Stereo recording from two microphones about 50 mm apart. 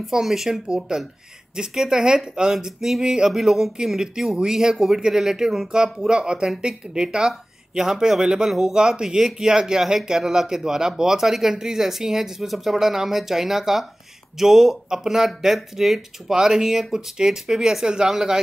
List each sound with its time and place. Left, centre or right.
0.0 s speech: centre
6.0 s speech: centre